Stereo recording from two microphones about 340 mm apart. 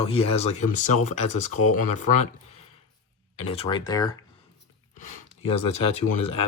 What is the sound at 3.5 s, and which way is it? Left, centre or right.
Speech, centre.